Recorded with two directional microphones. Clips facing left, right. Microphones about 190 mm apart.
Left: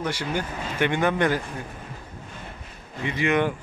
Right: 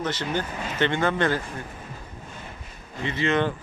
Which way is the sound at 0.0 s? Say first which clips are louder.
Even; 10° left (ahead or behind).